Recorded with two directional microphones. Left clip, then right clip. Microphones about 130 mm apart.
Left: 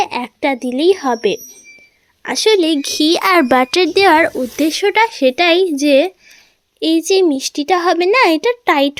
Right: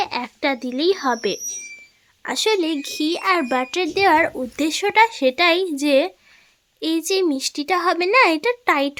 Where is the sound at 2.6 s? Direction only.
30° left (ahead or behind); by 3.7 s 55° left (ahead or behind).